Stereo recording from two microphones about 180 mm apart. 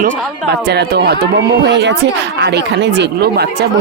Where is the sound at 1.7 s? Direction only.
75° right (ahead or behind).